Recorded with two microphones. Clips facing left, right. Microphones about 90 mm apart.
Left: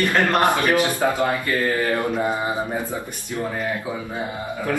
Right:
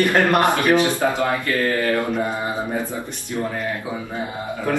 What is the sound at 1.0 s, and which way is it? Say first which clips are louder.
Speech: even; 15° left (ahead or behind).